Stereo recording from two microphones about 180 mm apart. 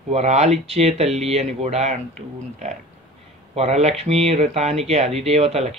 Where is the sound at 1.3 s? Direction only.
35° right (ahead or behind).